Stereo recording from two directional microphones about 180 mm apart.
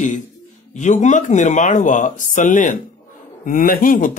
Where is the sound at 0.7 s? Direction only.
40° left (ahead or behind).